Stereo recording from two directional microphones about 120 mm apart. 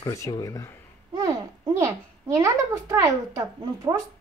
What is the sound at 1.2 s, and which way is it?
A child's voice, 25° right (ahead or behind).